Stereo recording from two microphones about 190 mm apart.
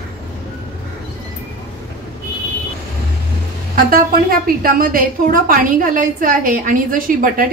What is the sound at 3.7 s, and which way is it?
A woman's voice, 50° right (ahead or behind).